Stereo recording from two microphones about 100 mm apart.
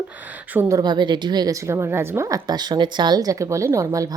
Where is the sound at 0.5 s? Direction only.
30° right (ahead or behind).